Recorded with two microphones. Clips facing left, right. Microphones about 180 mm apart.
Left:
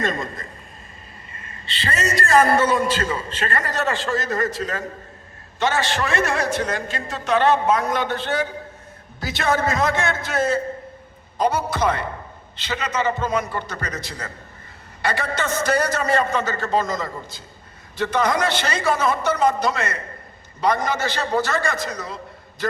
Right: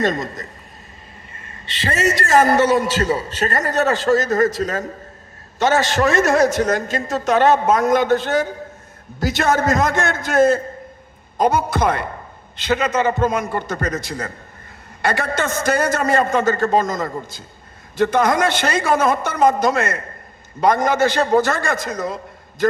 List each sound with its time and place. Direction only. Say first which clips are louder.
0.0 s a man's voice: right 5 dB; 40° right (ahead or behind)
3.0 s a man's voice: right 5 dB; 40° right (ahead or behind)